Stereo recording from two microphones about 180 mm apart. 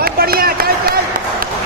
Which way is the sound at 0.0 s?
55° right (ahead or behind).